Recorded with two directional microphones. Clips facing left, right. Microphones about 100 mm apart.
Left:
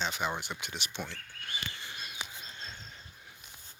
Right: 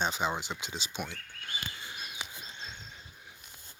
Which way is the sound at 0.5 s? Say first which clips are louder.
Right 1 dB; 15° right (ahead or behind).